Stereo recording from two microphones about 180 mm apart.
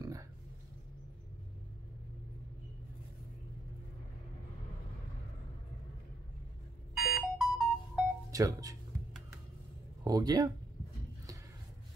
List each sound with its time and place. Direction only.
0.0 s a sound: 20° right (ahead or behind)
7.2 s music: centre (ahead or behind)
8.3 s speech: 20° right (ahead or behind)
10.0 s speech: 20° right (ahead or behind)